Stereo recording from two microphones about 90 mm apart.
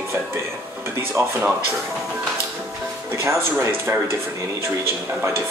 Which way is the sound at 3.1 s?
30° right (ahead or behind).